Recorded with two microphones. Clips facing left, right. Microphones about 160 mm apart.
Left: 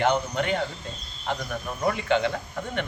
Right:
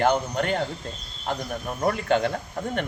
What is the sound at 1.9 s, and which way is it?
Speech, 45° right (ahead or behind).